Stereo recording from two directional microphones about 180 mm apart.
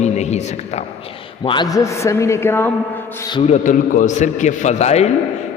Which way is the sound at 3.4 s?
45° left (ahead or behind).